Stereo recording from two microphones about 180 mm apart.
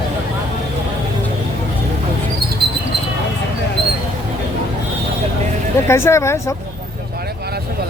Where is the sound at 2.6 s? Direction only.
65° right (ahead or behind).